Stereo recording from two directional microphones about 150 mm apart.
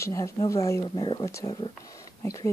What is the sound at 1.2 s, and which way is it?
Speech, 20° left (ahead or behind).